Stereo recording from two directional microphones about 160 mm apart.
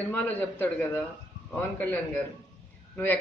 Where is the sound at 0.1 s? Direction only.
10° left (ahead or behind).